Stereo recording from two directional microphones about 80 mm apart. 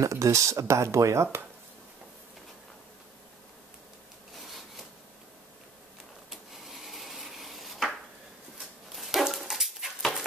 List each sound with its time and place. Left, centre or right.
0.0 s speech: right
4.3 s rub: centre
6.3 s a sound: centre
8.9 s dog: centre